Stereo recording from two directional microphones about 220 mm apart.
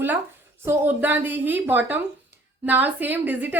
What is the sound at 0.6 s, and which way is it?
A woman's voice, 10° right (ahead or behind).